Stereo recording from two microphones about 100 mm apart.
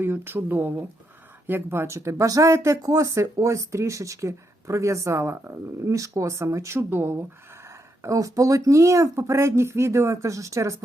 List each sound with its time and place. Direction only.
0.0 s speech: 20° right (ahead or behind)
8.0 s speech: 35° right (ahead or behind)